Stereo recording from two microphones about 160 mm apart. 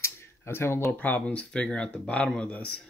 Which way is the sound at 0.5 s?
15° left (ahead or behind).